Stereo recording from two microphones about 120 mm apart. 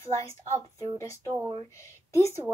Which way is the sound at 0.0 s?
25° left (ahead or behind).